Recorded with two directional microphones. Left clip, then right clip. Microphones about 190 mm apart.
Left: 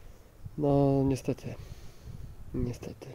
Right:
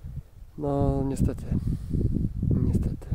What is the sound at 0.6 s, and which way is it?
Speech, 10° right (ahead or behind).